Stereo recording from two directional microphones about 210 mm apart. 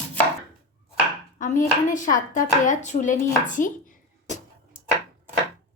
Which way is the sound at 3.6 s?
40° left (ahead or behind).